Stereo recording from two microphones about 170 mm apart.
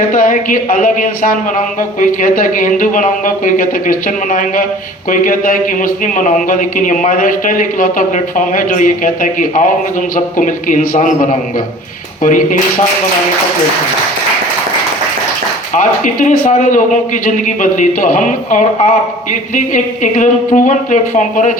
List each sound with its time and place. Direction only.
0.1 s a man's voice: 50° left (ahead or behind)
15.7 s a man's voice: 50° left (ahead or behind)